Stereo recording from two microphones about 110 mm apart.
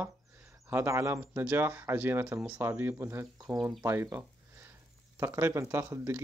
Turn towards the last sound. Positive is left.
turn(degrees=-20)  # may be behind; listen again after turning